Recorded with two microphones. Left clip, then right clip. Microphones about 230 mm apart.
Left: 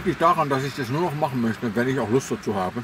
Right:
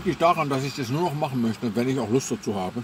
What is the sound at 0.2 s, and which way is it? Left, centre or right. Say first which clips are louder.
A man's voice: left 2 dB; centre.